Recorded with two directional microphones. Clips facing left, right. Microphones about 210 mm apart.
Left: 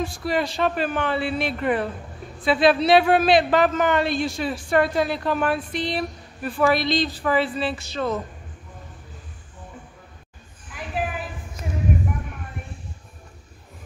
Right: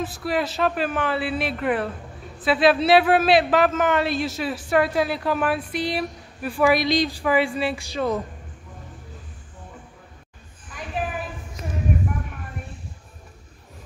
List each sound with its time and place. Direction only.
0.0 s a man's voice: 5° right (ahead or behind)